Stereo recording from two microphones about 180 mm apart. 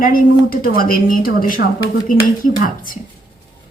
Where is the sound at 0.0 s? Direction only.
50° left (ahead or behind).